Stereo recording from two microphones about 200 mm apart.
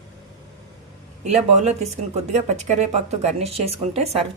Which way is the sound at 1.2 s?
35° right (ahead or behind).